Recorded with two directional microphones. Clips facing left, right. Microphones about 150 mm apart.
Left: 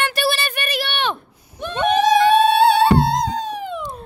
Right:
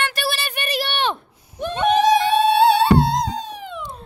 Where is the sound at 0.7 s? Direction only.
35° right (ahead or behind).